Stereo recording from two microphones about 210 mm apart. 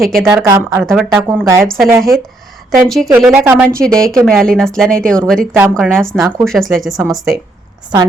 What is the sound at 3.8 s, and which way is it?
A woman's voice, 5° left (ahead or behind).